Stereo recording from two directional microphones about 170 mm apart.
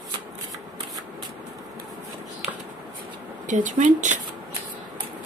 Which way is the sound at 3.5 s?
50° right (ahead or behind).